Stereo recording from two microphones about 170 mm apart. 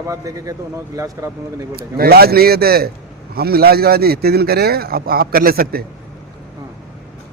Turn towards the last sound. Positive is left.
turn(degrees=-60)  # may be behind; listen again after turning